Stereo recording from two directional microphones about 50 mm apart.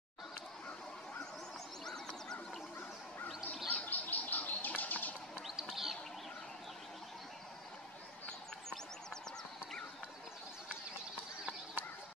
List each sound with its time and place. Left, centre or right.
3.6 s bird: left
5.6 s bird: centre
8.3 s a sound: centre